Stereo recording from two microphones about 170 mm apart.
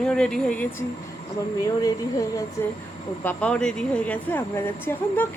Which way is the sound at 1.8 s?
20° left (ahead or behind).